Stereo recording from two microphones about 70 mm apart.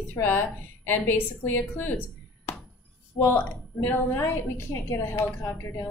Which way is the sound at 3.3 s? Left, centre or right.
Left.